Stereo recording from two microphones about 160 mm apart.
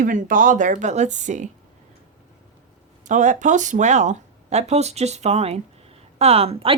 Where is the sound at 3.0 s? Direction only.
50° right (ahead or behind).